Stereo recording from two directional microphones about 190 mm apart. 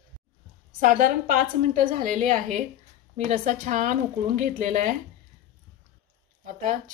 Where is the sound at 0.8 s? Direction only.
45° right (ahead or behind).